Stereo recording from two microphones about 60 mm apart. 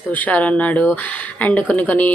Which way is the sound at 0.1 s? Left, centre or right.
Left.